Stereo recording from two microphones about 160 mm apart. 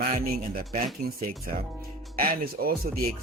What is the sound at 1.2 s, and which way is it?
Speech, 60° right (ahead or behind).